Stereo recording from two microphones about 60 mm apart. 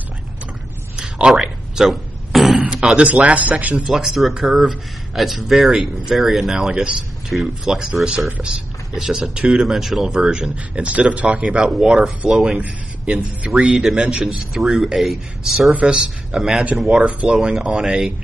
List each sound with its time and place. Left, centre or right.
0.9 s a sound: centre
2.6 s a sound: centre
3.3 s speech: right
3.7 s a man's voice: centre
12.5 s a man's voice: right
13.5 s a man's voice: centre
15.8 s a man's voice: centre